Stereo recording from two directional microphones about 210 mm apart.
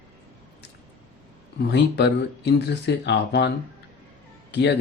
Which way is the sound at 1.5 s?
55° left (ahead or behind).